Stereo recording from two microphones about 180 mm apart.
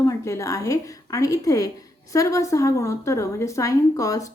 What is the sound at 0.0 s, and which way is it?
A woman's voice, 15° left (ahead or behind).